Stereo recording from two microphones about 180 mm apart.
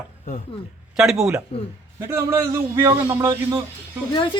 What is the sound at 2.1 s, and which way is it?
A man's voice, 15° right (ahead or behind).